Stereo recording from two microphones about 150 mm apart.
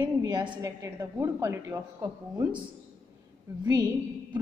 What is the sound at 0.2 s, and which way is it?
A woman's voice, 30° right (ahead or behind).